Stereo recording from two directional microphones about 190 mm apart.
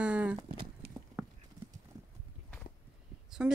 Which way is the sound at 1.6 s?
40° right (ahead or behind).